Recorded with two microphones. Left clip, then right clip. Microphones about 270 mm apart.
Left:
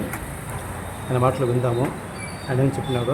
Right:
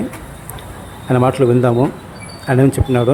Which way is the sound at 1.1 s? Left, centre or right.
Right.